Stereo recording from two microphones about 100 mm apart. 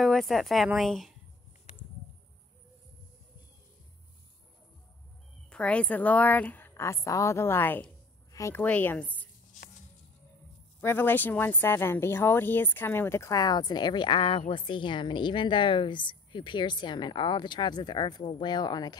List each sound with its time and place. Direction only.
0.0 s speech: centre (ahead or behind)
5.5 s a woman's voice: 10° left (ahead or behind); by 8.6 s 30° left (ahead or behind)
8.6 s a woman's voice: 15° left (ahead or behind)
10.8 s speech: 20° left (ahead or behind); by 18.9 s 45° left (ahead or behind)